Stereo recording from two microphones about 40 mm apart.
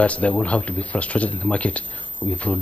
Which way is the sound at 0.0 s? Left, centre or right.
Left.